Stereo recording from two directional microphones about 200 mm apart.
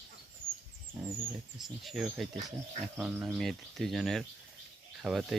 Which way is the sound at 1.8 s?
Centre (ahead or behind).